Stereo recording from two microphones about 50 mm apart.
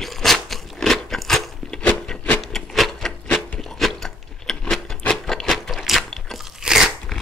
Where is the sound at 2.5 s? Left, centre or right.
Centre.